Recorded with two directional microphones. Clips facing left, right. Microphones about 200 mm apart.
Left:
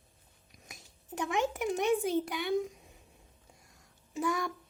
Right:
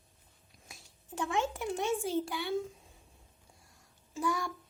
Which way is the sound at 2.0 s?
20° left (ahead or behind).